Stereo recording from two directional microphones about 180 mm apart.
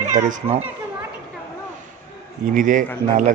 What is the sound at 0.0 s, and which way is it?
Speech, 45° right (ahead or behind).